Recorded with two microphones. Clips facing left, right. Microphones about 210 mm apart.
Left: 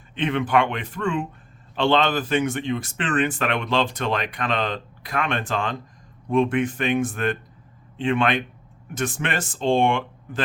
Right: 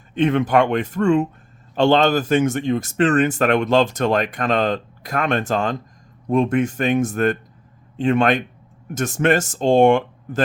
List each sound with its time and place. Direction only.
0.1 s speech: 45° right (ahead or behind)